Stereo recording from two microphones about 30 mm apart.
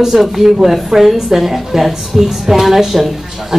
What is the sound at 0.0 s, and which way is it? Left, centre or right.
A woman's voice, centre.